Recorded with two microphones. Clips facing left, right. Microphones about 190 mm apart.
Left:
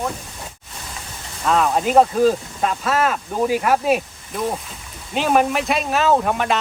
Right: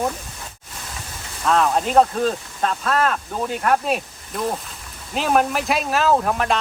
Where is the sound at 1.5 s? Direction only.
5° left (ahead or behind).